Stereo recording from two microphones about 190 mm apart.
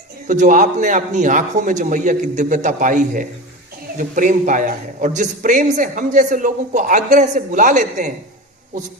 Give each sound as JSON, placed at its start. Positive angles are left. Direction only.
{"t": 0.3, "sound": "a man's voice", "side_deg": -40}